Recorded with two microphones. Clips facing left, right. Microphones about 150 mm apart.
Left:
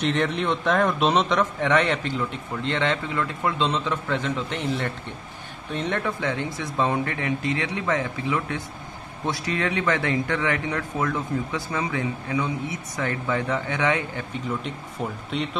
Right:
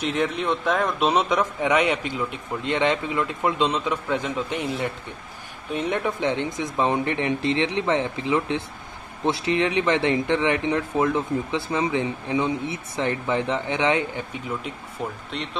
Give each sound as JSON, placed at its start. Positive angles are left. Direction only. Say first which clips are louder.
{"t": 0.0, "sound": "a man's voice", "louder": "left 1 dB", "side_deg": -5}
{"t": 15.0, "sound": "speech", "louder": "even", "side_deg": 0}